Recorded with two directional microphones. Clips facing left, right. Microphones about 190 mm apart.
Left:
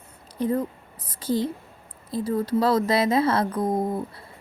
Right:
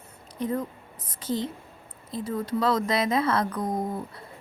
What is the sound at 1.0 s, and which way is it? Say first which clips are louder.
Speech: left 4 dB; 10° left (ahead or behind).